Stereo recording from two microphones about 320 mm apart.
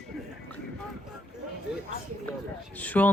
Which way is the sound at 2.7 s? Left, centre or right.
Centre.